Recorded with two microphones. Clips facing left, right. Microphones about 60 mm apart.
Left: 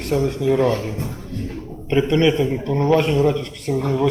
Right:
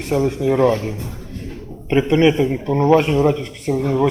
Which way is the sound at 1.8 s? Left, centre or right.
Centre.